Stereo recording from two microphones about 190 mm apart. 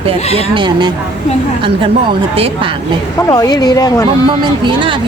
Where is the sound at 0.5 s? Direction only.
25° right (ahead or behind).